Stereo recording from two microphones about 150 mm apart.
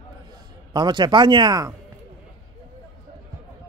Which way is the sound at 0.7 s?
30° right (ahead or behind).